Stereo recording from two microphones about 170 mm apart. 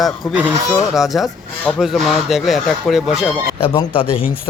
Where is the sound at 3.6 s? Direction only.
30° left (ahead or behind).